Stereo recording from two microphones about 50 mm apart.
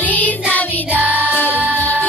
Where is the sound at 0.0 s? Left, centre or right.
Left.